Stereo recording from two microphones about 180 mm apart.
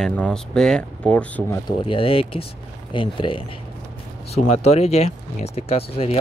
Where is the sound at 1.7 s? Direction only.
30° left (ahead or behind).